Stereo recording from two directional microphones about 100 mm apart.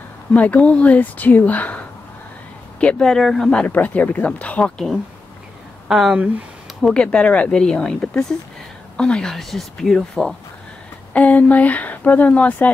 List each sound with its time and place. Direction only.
0.3 s speech: 15° left (ahead or behind)
2.8 s speech: 10° left (ahead or behind)
5.9 s speech: 5° right (ahead or behind)
6.8 s a woman's voice: 10° left (ahead or behind)